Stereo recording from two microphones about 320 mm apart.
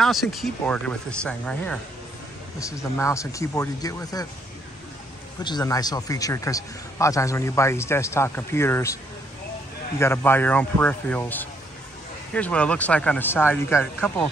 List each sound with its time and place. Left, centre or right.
0.0 s speech: centre
3.0 s a man's voice: centre
5.4 s a man's voice: centre
9.9 s speech: centre